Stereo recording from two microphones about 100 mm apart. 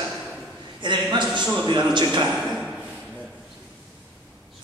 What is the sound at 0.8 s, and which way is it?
Speech, 50° right (ahead or behind).